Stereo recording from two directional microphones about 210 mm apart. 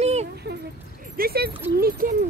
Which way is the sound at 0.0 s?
30° right (ahead or behind).